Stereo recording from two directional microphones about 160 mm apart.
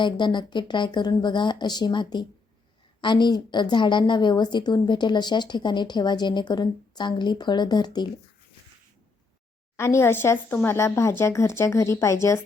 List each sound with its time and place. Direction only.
0.0 s a woman's voice: 30° left (ahead or behind)
9.7 s speech: 15° left (ahead or behind)